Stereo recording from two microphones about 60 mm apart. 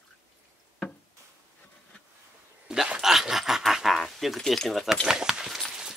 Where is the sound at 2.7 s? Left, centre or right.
Centre.